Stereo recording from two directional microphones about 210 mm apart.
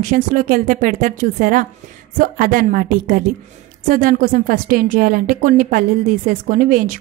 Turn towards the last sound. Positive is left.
turn(degrees=-40)  # may be behind; listen again after turning